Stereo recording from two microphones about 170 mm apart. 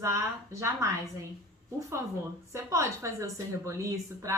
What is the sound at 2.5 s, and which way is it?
A woman's voice, 15° right (ahead or behind).